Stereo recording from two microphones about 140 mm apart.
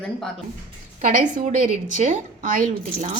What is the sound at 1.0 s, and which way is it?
A woman's voice, 60° right (ahead or behind).